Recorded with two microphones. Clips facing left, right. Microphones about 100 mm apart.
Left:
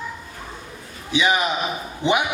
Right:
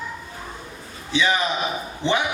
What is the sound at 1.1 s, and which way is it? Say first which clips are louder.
A man's voice: left 1 dB; 15° left (ahead or behind).